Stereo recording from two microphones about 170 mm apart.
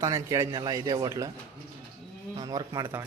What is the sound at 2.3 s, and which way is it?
Speech, 25° right (ahead or behind).